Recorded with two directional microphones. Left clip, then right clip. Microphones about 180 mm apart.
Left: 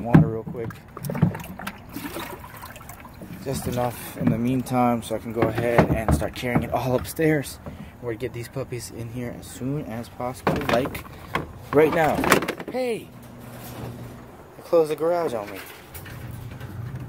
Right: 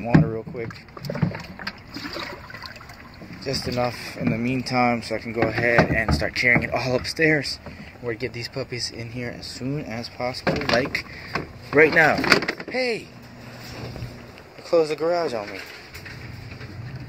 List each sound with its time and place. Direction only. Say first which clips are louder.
0.0 s speech: left 1 dB; centre (ahead or behind)
0.7 s speech: right 1 dB; 30° left (ahead or behind)
3.6 s speech: even; 10° left (ahead or behind)
8.0 s speech: right 2 dB; 5° left (ahead or behind)
14.7 s speech: even; 10° left (ahead or behind)